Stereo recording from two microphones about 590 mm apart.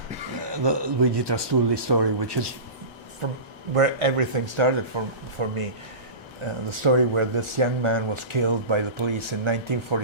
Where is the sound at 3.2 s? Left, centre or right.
Right.